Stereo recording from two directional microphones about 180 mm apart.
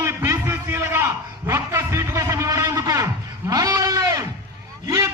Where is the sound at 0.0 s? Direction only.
15° right (ahead or behind).